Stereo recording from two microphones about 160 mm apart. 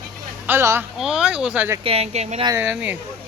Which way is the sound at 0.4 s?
15° right (ahead or behind).